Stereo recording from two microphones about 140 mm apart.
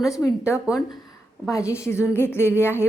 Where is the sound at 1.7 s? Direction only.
20° left (ahead or behind).